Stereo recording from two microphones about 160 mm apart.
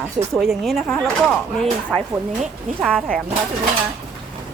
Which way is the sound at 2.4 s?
Centre (ahead or behind).